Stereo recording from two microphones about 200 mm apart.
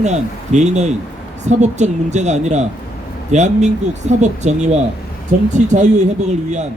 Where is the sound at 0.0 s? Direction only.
35° right (ahead or behind).